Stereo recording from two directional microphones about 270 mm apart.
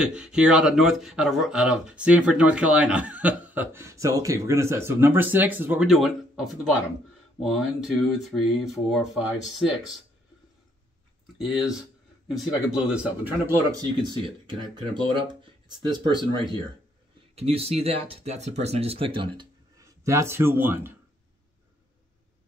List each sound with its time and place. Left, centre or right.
0.0 s speech: centre
11.3 s speech: centre
17.4 s speech: right